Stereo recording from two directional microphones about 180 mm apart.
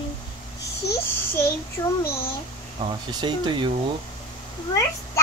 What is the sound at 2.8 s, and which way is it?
Speech, 25° right (ahead or behind).